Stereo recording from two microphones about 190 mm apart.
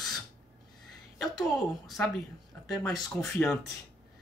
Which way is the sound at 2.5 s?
10° left (ahead or behind).